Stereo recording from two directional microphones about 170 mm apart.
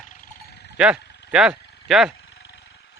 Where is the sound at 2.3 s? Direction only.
90° left.